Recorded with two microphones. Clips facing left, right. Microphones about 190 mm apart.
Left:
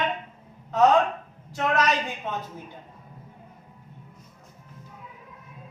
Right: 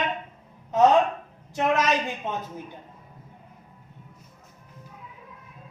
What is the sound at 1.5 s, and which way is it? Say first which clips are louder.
Speech: right 2 dB; 20° right (ahead or behind).